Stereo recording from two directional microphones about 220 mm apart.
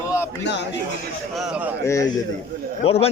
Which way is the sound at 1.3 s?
5° right (ahead or behind).